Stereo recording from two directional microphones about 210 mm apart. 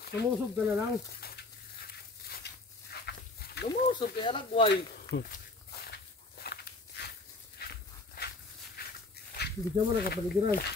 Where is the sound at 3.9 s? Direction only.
25° left (ahead or behind).